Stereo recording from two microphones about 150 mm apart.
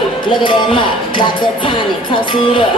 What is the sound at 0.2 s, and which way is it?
Music, 35° left (ahead or behind).